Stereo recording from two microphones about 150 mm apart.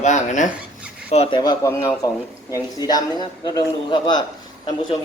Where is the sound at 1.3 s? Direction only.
25° left (ahead or behind).